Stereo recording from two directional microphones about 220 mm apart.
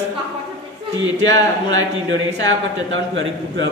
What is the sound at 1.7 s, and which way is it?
A man's voice, 60° right (ahead or behind).